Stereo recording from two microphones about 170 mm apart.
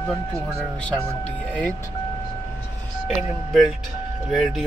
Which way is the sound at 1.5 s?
10° left (ahead or behind).